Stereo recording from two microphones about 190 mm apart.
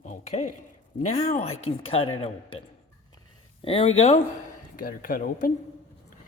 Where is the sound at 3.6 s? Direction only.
30° left (ahead or behind).